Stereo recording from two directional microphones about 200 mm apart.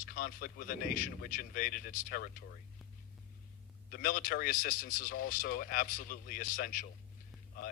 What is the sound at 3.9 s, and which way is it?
A man's voice, 45° left (ahead or behind).